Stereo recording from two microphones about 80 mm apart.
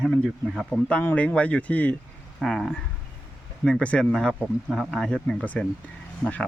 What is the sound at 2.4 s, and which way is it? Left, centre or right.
Speech, centre.